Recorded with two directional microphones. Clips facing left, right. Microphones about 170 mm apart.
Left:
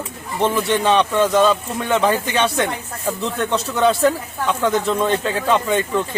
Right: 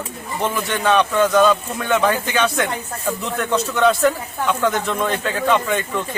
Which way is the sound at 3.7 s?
30° left (ahead or behind).